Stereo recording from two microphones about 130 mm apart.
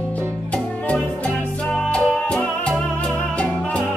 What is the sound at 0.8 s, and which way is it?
Music, 10° left (ahead or behind).